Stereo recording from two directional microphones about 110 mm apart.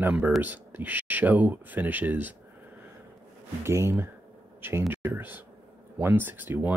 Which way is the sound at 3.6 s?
25° right (ahead or behind).